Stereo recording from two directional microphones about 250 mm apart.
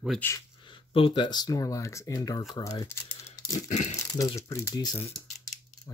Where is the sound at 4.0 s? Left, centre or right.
Centre.